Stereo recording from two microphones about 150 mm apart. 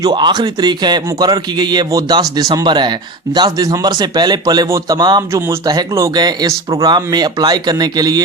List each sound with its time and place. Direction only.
0.0 s a man's voice: 30° right (ahead or behind)